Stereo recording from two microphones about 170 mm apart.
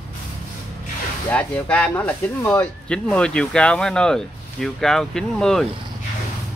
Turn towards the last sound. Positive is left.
turn(degrees=5)  # may be behind; listen again after turning